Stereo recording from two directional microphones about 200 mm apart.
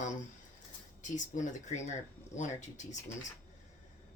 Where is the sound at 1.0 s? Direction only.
40° left (ahead or behind).